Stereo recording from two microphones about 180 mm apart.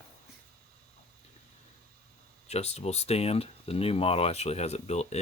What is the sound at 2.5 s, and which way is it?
Speech, 35° left (ahead or behind).